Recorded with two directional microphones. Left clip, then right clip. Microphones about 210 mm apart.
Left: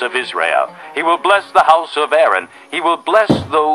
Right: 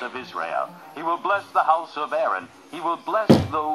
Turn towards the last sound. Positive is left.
turn(degrees=30)  # may be behind; listen again after turning